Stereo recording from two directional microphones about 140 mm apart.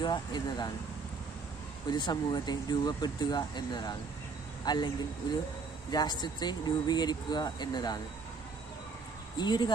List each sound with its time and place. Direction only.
0.0 s speech: 30° left (ahead or behind)
1.9 s speech: 30° left (ahead or behind)
5.9 s speech: 30° left (ahead or behind)
9.4 s speech: 30° left (ahead or behind)